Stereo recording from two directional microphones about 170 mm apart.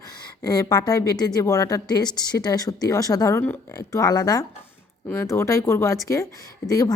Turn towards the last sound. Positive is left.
turn(degrees=20)  # may be behind; listen again after turning